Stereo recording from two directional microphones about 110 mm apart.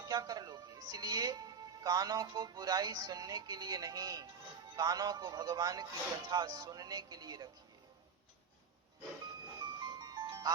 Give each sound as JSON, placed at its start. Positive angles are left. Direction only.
{"t": 0.1, "sound": "speech", "side_deg": -35}
{"t": 9.8, "sound": "music", "side_deg": -35}